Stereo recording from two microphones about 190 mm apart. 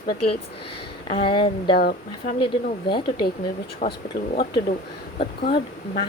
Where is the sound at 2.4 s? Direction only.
25° left (ahead or behind).